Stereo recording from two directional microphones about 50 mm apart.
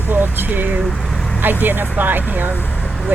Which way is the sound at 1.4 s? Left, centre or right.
Right.